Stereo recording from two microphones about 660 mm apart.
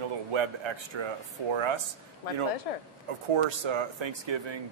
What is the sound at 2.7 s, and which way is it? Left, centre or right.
Speech, left.